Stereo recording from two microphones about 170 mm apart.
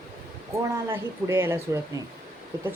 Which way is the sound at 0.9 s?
15° right (ahead or behind).